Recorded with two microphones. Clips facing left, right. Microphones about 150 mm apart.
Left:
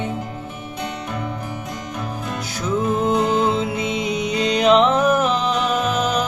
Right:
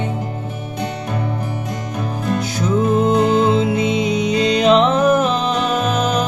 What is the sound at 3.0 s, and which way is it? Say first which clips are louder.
Music: right 4 dB; 25° right (ahead or behind).